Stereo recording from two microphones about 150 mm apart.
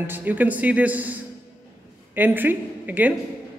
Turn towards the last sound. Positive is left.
turn(degrees=-10)  # may be behind; listen again after turning